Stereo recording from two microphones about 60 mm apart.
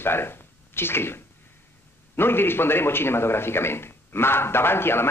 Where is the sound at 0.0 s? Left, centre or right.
Left.